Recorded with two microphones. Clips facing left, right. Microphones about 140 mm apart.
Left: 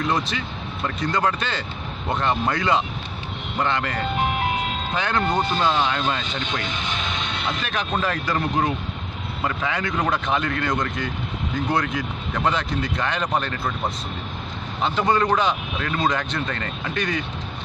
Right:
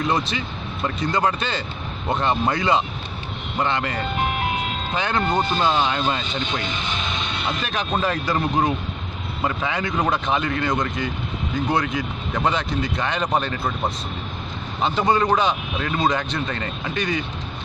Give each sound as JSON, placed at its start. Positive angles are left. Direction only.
{"t": 0.0, "sound": "speech", "side_deg": -20}
{"t": 5.3, "sound": "speech", "side_deg": 0}
{"t": 5.6, "sound": "speech", "side_deg": -20}